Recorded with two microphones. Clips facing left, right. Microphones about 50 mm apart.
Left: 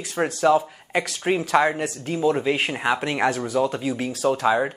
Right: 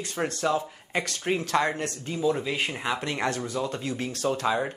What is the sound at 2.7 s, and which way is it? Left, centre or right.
Speech, left.